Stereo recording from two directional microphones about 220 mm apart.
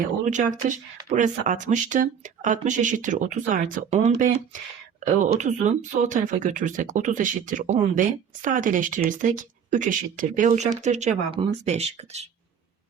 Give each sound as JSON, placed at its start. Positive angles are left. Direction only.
{"t": 0.3, "sound": "speech", "side_deg": -35}